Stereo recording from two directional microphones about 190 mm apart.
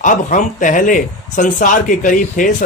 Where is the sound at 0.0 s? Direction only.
40° left (ahead or behind).